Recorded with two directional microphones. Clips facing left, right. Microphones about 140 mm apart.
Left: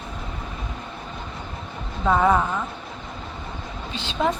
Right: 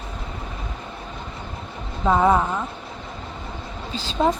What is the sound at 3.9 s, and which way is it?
Speech, 35° right (ahead or behind).